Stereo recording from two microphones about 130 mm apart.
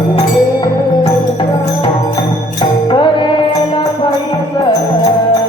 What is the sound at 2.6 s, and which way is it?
Music, 35° left (ahead or behind).